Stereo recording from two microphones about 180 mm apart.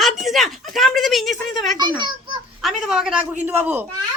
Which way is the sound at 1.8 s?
25° right (ahead or behind).